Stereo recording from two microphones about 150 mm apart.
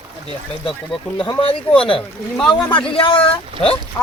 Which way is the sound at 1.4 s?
35° left (ahead or behind).